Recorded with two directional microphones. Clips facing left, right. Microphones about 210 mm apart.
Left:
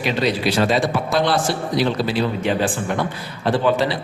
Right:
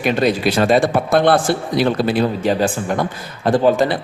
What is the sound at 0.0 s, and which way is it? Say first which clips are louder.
A man's voice: right 4 dB; 50° right (ahead or behind).